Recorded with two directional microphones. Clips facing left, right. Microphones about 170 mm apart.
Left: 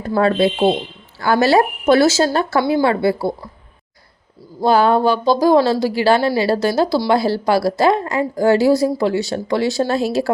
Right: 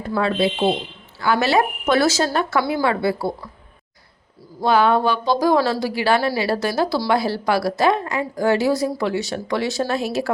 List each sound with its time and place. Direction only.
0.2 s speech: 45° left (ahead or behind); by 3.2 s 25° left (ahead or behind)
4.6 s speech: 35° left (ahead or behind)